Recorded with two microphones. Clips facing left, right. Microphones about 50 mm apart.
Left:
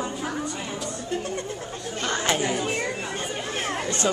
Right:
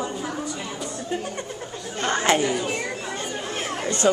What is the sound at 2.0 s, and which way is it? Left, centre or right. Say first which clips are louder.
Chatter: right 4 dB; right.